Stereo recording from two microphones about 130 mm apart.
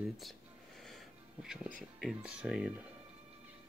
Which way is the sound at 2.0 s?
10° right (ahead or behind).